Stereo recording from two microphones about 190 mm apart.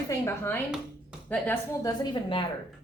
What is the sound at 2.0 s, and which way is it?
Speech, 25° left (ahead or behind).